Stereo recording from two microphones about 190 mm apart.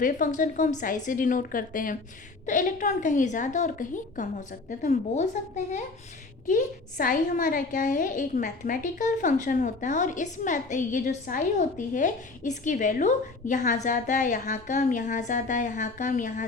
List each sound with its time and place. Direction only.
0.0 s a woman's voice: 45° left (ahead or behind)